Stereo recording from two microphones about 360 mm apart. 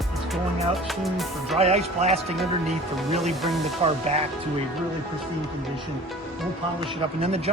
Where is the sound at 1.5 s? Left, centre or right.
Centre.